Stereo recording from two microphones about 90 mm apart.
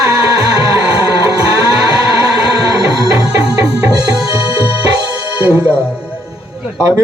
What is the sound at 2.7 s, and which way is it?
Music, 45° right (ahead or behind).